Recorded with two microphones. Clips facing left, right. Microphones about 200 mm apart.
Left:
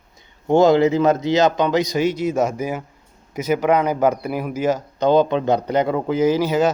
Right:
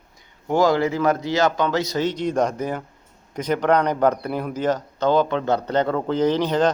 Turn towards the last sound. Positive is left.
turn(degrees=5)  # may be behind; listen again after turning